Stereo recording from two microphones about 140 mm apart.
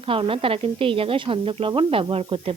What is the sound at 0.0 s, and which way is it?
Speech, 40° right (ahead or behind).